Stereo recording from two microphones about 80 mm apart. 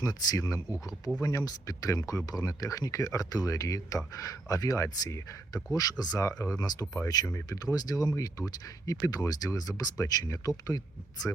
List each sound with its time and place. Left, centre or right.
0.0 s speech: left
5.7 s speech: left
7.3 s speech: left